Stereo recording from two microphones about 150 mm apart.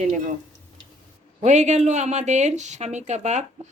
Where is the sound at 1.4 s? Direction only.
50° right (ahead or behind).